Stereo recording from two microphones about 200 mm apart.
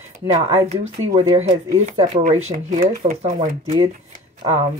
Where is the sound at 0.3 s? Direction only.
30° right (ahead or behind).